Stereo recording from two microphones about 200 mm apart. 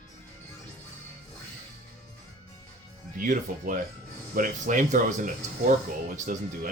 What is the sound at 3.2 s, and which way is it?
Speech, 40° right (ahead or behind).